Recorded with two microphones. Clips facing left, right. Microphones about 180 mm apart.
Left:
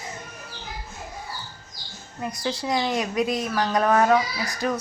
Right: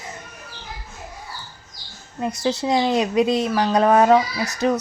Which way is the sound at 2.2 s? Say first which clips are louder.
Right 6 dB; 25° right (ahead or behind).